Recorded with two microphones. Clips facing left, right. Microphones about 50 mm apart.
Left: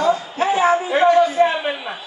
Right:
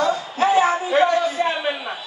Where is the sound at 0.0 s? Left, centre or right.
Left.